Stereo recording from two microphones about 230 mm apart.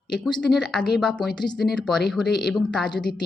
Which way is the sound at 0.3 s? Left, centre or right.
Centre.